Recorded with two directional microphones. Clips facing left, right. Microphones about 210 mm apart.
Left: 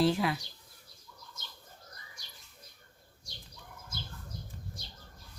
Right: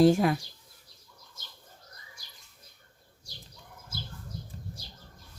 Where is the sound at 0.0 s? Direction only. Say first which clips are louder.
Right 7 dB; 45° right (ahead or behind).